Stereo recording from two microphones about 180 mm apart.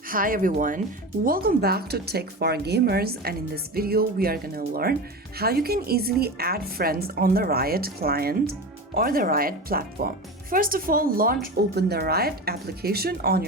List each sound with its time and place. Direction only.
0.1 s speech: 50° right (ahead or behind)
11.5 s speech: 65° right (ahead or behind)